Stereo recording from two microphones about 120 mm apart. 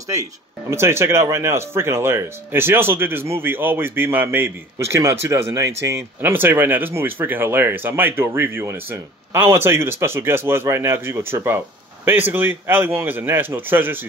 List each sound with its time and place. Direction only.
0.7 s speech: 20° right (ahead or behind)